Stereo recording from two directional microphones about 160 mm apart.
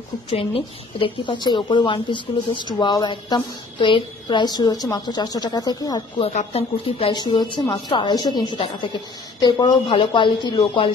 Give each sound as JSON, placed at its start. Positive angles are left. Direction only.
{"t": 0.3, "sound": "a woman's voice", "side_deg": 35}
{"t": 6.2, "sound": "a woman's voice", "side_deg": 40}